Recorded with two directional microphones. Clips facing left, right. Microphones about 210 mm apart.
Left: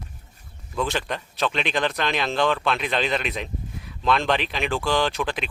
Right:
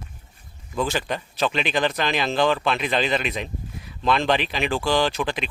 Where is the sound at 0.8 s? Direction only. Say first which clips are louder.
Right 1 dB; centre (ahead or behind).